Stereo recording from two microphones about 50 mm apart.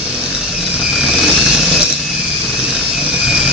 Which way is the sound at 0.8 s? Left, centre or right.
Centre.